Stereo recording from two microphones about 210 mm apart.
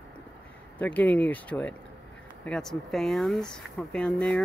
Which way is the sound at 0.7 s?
5° left (ahead or behind).